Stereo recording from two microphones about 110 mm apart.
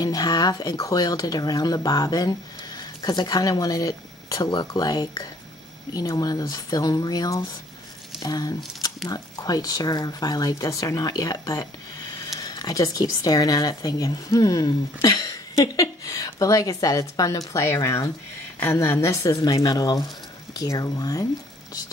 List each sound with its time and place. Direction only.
0.0 s speech: 35° left (ahead or behind)